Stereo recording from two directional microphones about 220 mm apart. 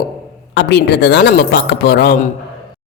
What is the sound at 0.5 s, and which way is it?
Speech, 50° left (ahead or behind).